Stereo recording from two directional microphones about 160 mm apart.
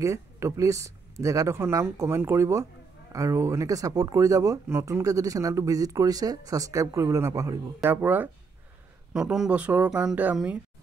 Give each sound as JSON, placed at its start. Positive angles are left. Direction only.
{"t": 0.0, "sound": "speech", "side_deg": -20}